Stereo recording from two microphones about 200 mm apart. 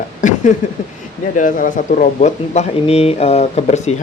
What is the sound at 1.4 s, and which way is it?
Speech, 40° left (ahead or behind).